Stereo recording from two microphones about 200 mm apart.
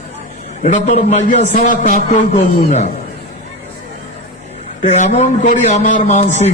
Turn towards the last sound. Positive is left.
turn(degrees=35)  # may be behind; listen again after turning